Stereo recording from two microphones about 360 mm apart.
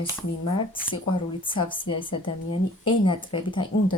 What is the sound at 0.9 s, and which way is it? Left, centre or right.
Speech, centre.